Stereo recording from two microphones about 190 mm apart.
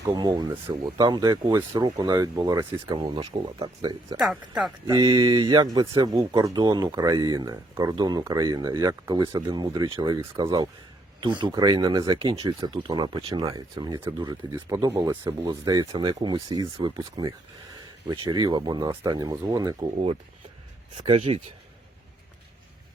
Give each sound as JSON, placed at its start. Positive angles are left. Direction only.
{"t": 0.0, "sound": "speech", "side_deg": -20}
{"t": 4.2, "sound": "speech", "side_deg": 0}
{"t": 4.9, "sound": "speech", "side_deg": -20}
{"t": 21.1, "sound": "speech", "side_deg": -35}